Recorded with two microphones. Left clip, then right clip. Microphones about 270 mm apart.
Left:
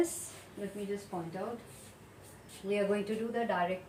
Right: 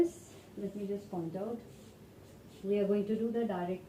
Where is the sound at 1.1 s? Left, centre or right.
Left.